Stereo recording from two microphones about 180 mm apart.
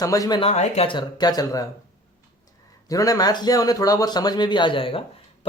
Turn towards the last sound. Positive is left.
turn(degrees=30)  # may be behind; listen again after turning